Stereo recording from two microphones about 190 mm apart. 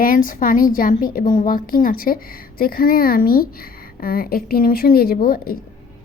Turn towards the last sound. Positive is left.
turn(degrees=50)  # may be behind; listen again after turning